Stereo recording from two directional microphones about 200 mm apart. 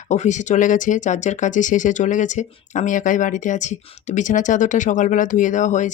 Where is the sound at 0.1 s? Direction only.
35° left (ahead or behind).